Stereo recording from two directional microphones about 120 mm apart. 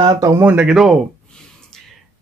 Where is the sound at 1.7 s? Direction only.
5° left (ahead or behind).